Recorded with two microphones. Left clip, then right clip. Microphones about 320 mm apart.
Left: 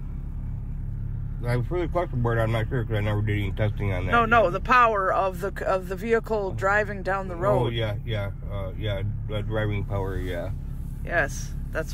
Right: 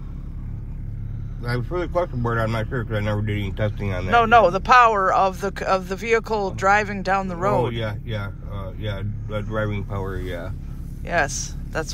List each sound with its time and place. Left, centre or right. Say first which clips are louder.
1.4 s speech: right 2 dB; centre
7.7 s speech: right 1 dB; centre
11.1 s speech: right 4 dB; centre